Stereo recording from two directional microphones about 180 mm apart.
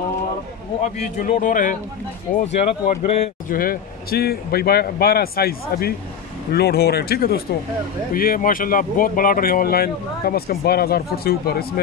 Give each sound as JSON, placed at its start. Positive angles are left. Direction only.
{"t": 0.7, "sound": "speech", "side_deg": 45}
{"t": 3.4, "sound": "speech", "side_deg": 55}